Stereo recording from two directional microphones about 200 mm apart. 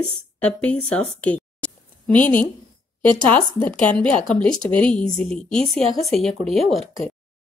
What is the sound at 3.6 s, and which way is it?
Speech, 5° left (ahead or behind).